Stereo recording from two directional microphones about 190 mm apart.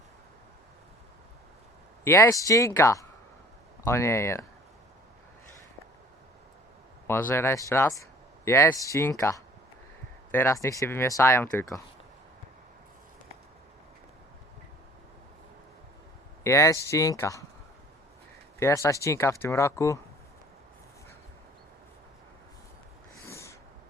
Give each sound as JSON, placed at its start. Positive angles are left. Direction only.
{"t": 2.0, "sound": "speech", "side_deg": 15}
{"t": 7.1, "sound": "speech", "side_deg": 10}
{"t": 16.4, "sound": "speech", "side_deg": 15}
{"t": 18.6, "sound": "speech", "side_deg": 15}
{"t": 23.2, "sound": "snort", "side_deg": 15}